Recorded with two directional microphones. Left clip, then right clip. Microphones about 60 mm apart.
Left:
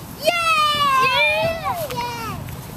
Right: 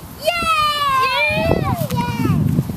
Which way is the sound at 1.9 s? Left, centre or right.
Right.